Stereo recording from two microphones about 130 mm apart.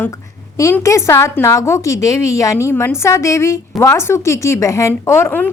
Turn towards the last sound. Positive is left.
turn(degrees=15)  # may be behind; listen again after turning